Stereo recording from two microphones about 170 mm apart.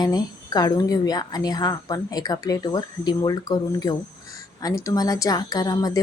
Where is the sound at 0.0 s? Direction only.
25° left (ahead or behind).